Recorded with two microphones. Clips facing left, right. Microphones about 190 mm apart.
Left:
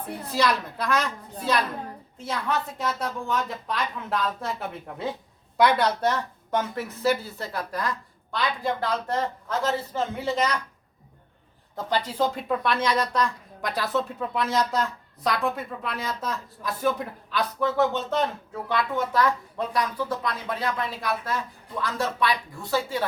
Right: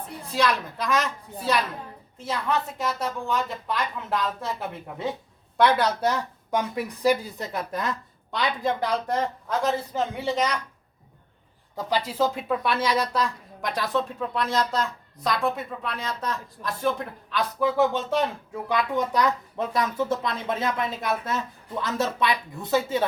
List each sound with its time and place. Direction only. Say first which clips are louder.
0.3 s a woman's voice: even; centre (ahead or behind)
5.5 s a woman's voice: even; centre (ahead or behind)
11.9 s a woman's voice: right 1 dB; 5° right (ahead or behind)
17.7 s a woman's voice: right 2 dB; 10° right (ahead or behind)